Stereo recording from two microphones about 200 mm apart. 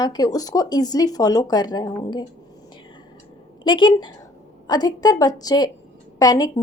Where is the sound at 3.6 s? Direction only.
25° left (ahead or behind).